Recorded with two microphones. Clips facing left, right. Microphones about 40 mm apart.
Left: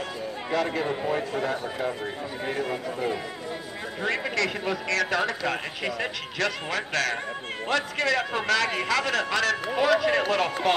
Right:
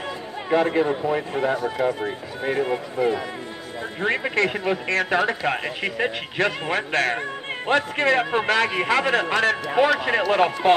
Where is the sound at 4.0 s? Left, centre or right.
Right.